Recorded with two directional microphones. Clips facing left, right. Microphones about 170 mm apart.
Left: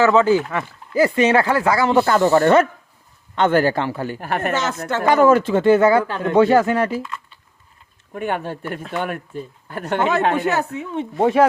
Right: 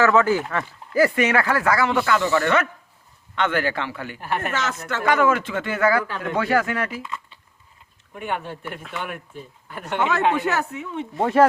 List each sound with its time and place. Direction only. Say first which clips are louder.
0.0 s speech: left 3 dB; 25° left (ahead or behind)
4.2 s speech: left 2 dB; 50° left (ahead or behind)
4.9 s speech: left 6 dB; 35° left (ahead or behind)
7.0 s speech: left 2 dB; 15° right (ahead or behind)
8.1 s speech: left 5 dB; 45° left (ahead or behind)
10.4 s speech: left 3 dB; 25° left (ahead or behind)